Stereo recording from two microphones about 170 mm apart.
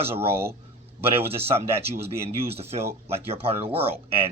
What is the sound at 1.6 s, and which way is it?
Speech, 15° right (ahead or behind).